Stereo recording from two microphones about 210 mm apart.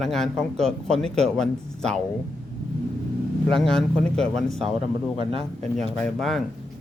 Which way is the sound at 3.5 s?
Centre (ahead or behind).